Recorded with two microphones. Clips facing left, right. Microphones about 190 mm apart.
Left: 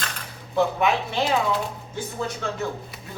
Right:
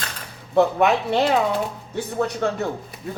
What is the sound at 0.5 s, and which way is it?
Speech, 65° right (ahead or behind).